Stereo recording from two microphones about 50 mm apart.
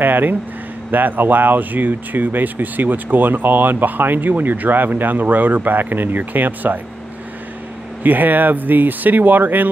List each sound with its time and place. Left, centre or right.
0.0 s speech: right
8.0 s speech: right